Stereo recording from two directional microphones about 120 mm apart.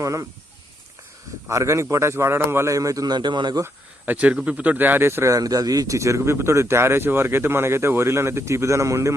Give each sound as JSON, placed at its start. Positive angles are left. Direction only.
{"t": 0.0, "sound": "speech", "side_deg": -25}
{"t": 1.5, "sound": "speech", "side_deg": -25}
{"t": 3.6, "sound": "speech", "side_deg": -15}